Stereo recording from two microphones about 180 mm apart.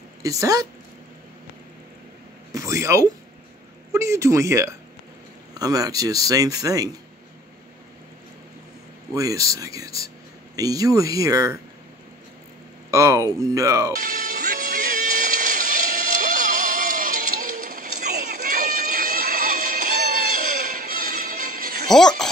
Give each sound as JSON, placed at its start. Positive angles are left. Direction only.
{"t": 0.2, "sound": "speech", "side_deg": -20}
{"t": 2.5, "sound": "a sound", "side_deg": -15}
{"t": 3.9, "sound": "speech", "side_deg": -15}
{"t": 9.1, "sound": "speech", "side_deg": -20}
{"t": 12.9, "sound": "speech", "side_deg": -20}
{"t": 13.9, "sound": "music", "side_deg": -50}
{"t": 21.8, "sound": "music", "side_deg": 0}